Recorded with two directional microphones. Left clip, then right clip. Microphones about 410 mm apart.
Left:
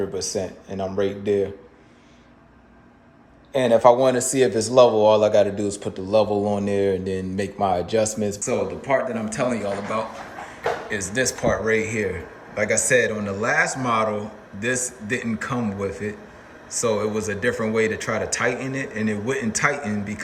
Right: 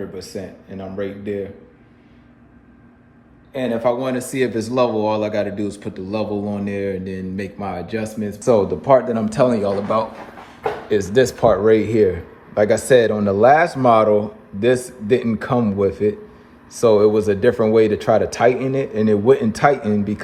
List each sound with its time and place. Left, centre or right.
0.1 s speech: centre
3.5 s speech: centre
8.8 s a man's voice: right
9.1 s speech: centre
11.3 s speech: centre